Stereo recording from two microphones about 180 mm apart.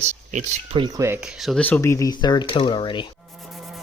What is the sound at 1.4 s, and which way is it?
Speech, 5° left (ahead or behind).